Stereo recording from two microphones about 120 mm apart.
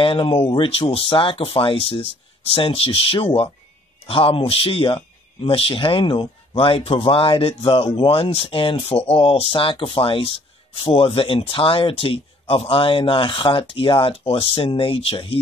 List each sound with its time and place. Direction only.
0.0 s speech: 45° left (ahead or behind)